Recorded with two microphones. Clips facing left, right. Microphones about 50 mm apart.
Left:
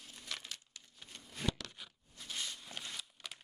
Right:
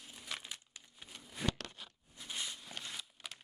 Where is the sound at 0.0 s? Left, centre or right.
Centre.